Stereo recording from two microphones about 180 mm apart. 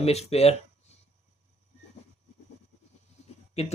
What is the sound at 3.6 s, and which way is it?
Speech, 35° left (ahead or behind).